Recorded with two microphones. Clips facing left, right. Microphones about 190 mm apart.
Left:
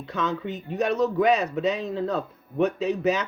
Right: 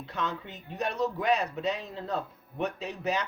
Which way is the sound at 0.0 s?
90° left.